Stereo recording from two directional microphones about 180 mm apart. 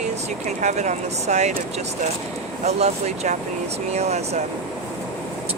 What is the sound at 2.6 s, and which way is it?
Speech, 35° right (ahead or behind).